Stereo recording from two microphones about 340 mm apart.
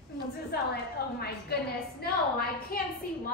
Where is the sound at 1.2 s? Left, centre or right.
Left.